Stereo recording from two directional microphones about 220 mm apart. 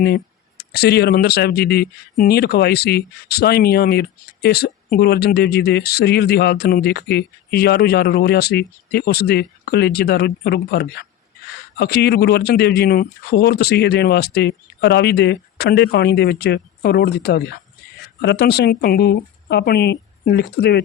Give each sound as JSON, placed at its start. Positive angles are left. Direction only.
{"t": 0.0, "sound": "speech", "side_deg": 45}